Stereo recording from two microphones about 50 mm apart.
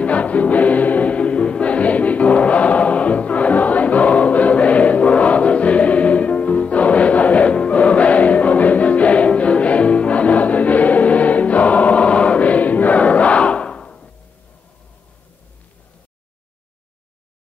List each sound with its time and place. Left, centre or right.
0.0 s music: left